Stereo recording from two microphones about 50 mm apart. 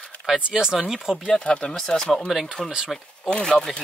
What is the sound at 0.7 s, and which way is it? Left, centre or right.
Speech, centre.